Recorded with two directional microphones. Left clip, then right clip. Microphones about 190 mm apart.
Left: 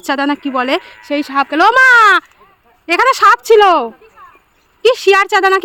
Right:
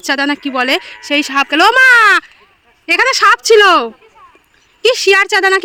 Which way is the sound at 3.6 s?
10° right (ahead or behind).